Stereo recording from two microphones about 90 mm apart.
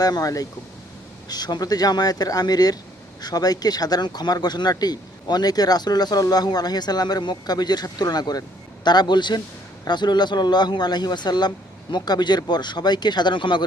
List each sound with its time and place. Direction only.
0.0 s speech: 45° left (ahead or behind); by 13.7 s 60° left (ahead or behind)